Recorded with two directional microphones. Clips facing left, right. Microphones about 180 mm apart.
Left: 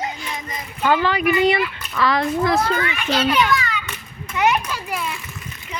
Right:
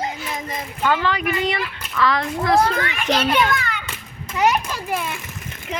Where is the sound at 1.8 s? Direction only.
90° right.